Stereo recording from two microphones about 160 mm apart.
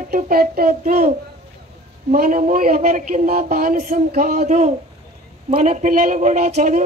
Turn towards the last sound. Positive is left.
turn(degrees=-45)  # may be behind; listen again after turning